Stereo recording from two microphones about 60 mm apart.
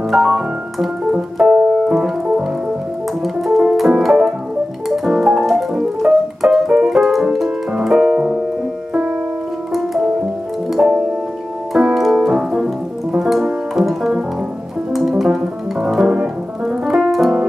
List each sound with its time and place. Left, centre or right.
0.1 s keyboard: centre
3.2 s music: centre
4.8 s piano: centre
7.8 s music: centre
8.1 s piano: centre
9.7 s music: centre
11.7 s piano: centre
13.2 s music: centre
16.6 s piano: centre